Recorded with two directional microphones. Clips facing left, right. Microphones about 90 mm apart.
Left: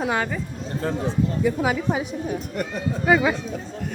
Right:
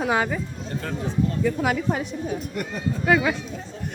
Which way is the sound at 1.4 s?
5° left (ahead or behind).